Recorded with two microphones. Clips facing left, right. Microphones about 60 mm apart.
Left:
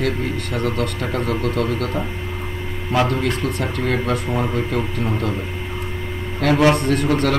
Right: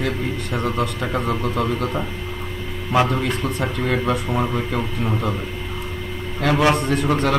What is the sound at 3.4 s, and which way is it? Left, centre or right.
Speech, right.